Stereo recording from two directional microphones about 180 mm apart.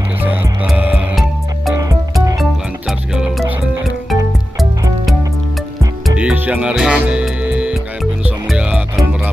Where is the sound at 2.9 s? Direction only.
5° right (ahead or behind).